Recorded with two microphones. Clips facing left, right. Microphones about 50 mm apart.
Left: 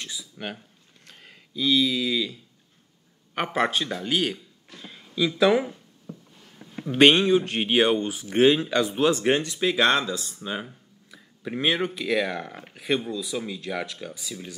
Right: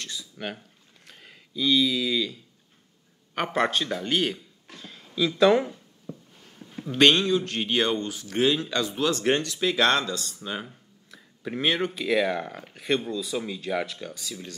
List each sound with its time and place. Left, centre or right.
0.0 s a sound: centre
3.3 s speech: centre
4.7 s a sound: centre
6.8 s a man's voice: centre
8.4 s speech: left
8.6 s a man's voice: centre